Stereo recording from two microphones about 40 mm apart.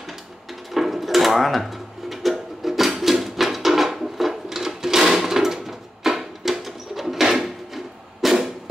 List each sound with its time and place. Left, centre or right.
0.7 s mechanisms: centre